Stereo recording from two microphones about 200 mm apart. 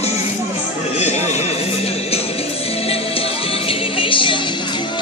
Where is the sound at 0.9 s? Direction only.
35° left (ahead or behind).